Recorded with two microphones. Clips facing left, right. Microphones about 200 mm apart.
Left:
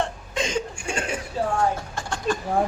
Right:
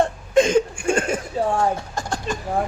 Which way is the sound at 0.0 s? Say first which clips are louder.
Right 10 dB; 50° right (ahead or behind).